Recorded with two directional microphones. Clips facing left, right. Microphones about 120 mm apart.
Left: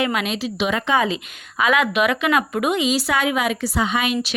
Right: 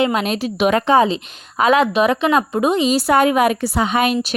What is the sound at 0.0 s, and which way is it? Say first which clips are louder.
Speech: right 4 dB; 30° right (ahead or behind).